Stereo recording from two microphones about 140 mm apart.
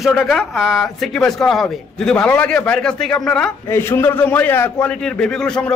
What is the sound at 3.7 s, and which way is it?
Speech, 15° left (ahead or behind).